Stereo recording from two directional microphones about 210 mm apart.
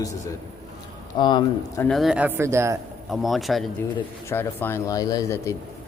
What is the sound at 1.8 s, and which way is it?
Speech, centre (ahead or behind).